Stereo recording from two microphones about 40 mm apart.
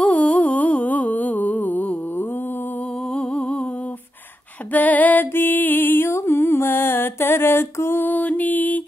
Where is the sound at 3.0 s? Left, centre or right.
Left.